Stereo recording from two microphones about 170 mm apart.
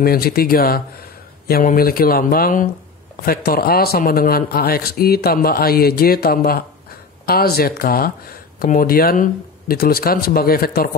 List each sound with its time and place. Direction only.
0.0 s speech: 60° left (ahead or behind)